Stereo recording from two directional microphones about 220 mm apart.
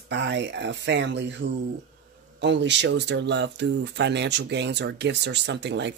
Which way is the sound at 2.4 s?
55° right (ahead or behind).